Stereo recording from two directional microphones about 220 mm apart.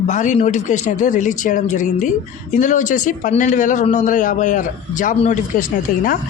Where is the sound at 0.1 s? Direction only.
35° left (ahead or behind).